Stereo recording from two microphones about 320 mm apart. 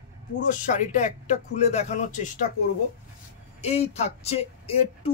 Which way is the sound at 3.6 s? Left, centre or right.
Centre.